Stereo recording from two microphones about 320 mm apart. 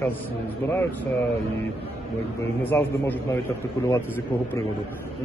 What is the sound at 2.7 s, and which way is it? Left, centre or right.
A man's voice, centre.